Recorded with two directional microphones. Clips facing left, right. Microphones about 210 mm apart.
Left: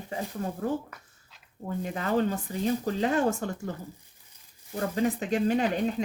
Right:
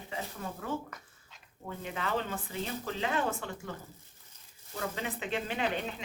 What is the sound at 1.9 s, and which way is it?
Speech, 45° left (ahead or behind).